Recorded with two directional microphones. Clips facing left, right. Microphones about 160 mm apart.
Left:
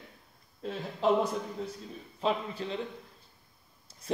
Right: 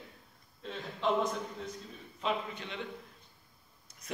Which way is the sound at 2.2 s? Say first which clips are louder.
Left 4 dB; 35° left (ahead or behind).